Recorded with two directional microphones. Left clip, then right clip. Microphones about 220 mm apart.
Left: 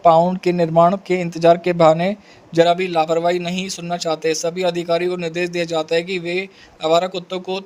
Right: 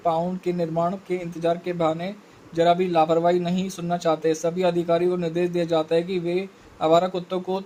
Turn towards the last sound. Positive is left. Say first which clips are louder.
# left 2 dB
turn(degrees=45)  # may be behind; listen again after turning